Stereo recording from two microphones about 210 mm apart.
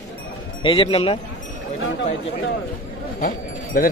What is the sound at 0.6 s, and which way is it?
Speech, 25° left (ahead or behind).